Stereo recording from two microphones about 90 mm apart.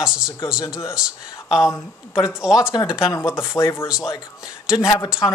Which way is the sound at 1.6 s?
30° left (ahead or behind).